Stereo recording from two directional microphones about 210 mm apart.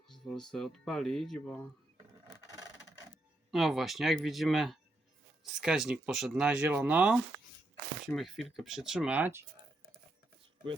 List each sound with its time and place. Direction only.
0.3 s speech: 5° left (ahead or behind)
2.2 s wood: 15° right (ahead or behind)
3.5 s speech: centre (ahead or behind)